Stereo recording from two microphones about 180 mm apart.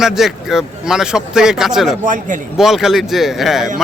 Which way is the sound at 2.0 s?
45° right (ahead or behind).